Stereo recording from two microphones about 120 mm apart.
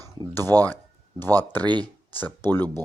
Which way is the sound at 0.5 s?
35° right (ahead or behind).